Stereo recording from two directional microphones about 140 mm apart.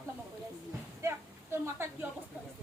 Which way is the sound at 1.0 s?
20° right (ahead or behind).